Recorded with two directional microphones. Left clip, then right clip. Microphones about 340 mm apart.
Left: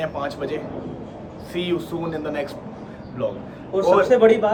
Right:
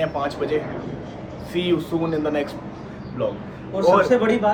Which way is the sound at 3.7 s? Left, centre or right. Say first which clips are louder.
Even; centre.